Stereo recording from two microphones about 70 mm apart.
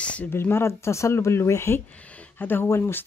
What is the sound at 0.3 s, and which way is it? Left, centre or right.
Speech, left.